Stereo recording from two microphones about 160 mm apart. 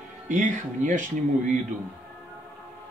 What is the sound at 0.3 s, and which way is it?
Speech, 55° right (ahead or behind).